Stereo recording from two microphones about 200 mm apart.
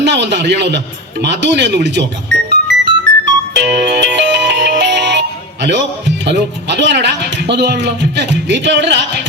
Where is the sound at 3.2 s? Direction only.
60° right (ahead or behind).